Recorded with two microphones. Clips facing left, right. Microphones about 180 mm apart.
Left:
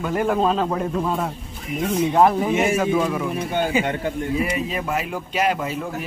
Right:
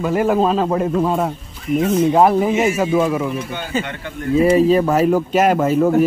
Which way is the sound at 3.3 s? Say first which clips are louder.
Left 3 dB; 55° left (ahead or behind).